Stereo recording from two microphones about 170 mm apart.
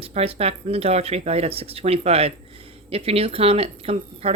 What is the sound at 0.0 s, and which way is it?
Speech, 35° right (ahead or behind).